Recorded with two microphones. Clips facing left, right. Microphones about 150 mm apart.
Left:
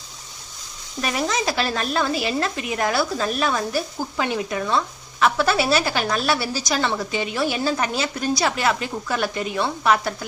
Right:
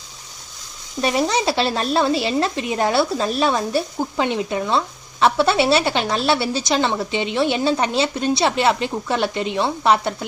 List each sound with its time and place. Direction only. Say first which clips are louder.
1.0 s a woman's voice: right 4 dB; 30° right (ahead or behind)